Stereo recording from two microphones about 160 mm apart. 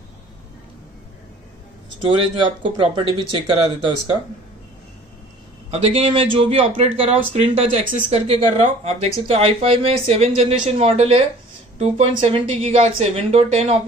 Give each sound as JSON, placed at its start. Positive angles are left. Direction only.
{"t": 2.0, "sound": "speech", "side_deg": -30}
{"t": 5.7, "sound": "speech", "side_deg": -35}